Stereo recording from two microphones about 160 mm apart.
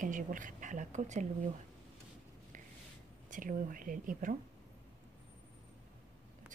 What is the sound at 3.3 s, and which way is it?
Speech, 55° right (ahead or behind).